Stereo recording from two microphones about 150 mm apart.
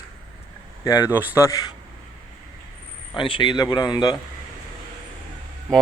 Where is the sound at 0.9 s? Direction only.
20° left (ahead or behind).